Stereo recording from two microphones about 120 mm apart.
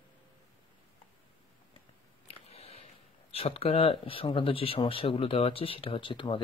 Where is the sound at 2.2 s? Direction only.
60° left (ahead or behind).